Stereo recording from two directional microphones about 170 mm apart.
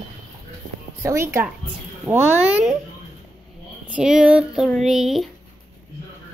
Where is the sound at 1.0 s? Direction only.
15° right (ahead or behind).